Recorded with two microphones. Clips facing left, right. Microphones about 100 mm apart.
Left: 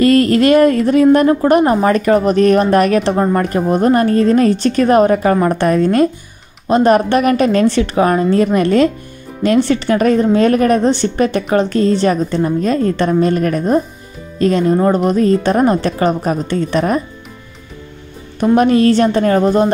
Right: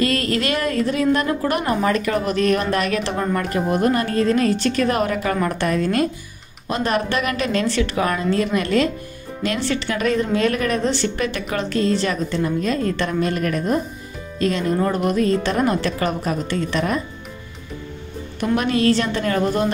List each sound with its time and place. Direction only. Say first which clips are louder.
0.0 s a woman's voice: left 10 dB; 40° left (ahead or behind)
18.4 s a woman's voice: left 8 dB; 40° left (ahead or behind)